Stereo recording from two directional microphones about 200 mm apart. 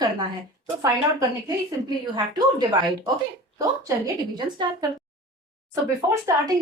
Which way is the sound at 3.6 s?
15° right (ahead or behind).